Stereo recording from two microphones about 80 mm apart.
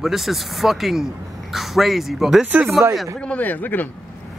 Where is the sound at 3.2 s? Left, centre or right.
Centre.